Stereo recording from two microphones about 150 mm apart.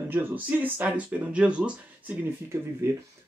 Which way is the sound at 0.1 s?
15° right (ahead or behind).